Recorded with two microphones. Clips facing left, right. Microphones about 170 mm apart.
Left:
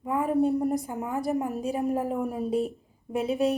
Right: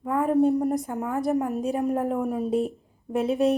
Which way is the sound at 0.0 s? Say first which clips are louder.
Right 3 dB; centre (ahead or behind).